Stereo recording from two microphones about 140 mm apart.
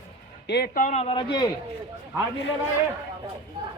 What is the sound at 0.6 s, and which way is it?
Speech, 85° left.